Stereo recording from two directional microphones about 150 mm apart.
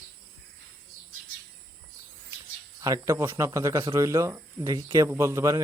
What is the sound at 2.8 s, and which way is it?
Speech, 20° right (ahead or behind).